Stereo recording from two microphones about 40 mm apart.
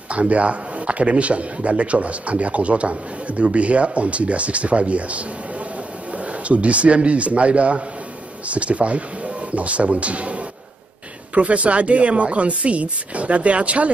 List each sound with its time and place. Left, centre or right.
0.1 s a man's voice: right